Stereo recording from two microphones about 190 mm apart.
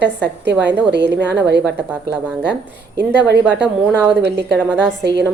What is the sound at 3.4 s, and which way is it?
Speech, 5° right (ahead or behind).